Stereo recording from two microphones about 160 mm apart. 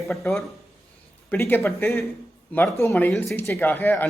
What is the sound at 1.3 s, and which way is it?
Speech, 10° left (ahead or behind).